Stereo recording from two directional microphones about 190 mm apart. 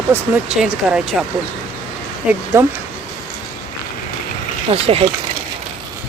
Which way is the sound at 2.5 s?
15° right (ahead or behind).